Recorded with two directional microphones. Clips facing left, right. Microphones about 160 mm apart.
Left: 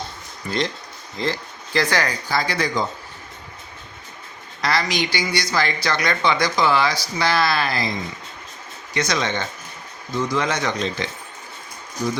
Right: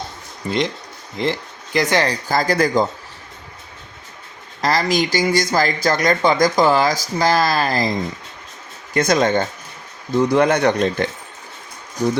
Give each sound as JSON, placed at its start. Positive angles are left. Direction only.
{"t": 0.4, "sound": "speech", "side_deg": -30}
{"t": 1.1, "sound": "speech", "side_deg": -20}
{"t": 2.0, "sound": "speech", "side_deg": -45}
{"t": 4.6, "sound": "speech", "side_deg": -40}
{"t": 10.1, "sound": "speech", "side_deg": -60}